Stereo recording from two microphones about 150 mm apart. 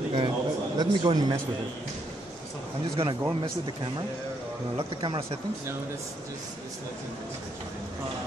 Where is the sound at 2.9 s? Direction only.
35° right (ahead or behind).